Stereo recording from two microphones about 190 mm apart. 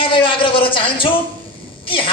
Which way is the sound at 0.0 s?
25° left (ahead or behind).